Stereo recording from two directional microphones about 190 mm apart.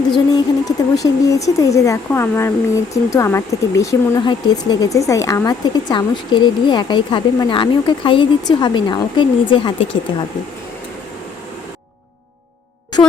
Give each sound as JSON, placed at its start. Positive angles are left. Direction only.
{"t": 0.3, "sound": "speech", "side_deg": 20}
{"t": 13.0, "sound": "speech", "side_deg": 20}